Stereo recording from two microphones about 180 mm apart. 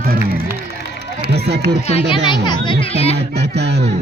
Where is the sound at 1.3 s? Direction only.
65° right (ahead or behind).